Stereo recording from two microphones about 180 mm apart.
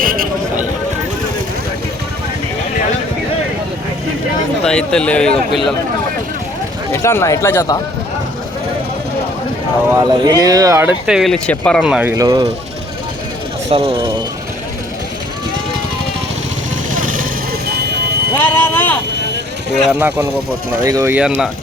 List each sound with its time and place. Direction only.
0.0 s a sound: 50° right (ahead or behind)
4.6 s speech: 5° left (ahead or behind)
6.9 s speech: 15° left (ahead or behind)
9.9 s speech: 20° right (ahead or behind); by 11.9 s 5° left (ahead or behind)
11.9 s speech: 5° right (ahead or behind)
12.1 s speech: 20° right (ahead or behind)
13.7 s speech: 30° right (ahead or behind)
16.9 s vehicle: 50° right (ahead or behind)
17.7 s music: 65° right (ahead or behind)
18.3 s speech: 10° left (ahead or behind)
19.9 s speech: 10° right (ahead or behind)
20.8 s speech: 20° right (ahead or behind)
21.1 s speech: 5° right (ahead or behind)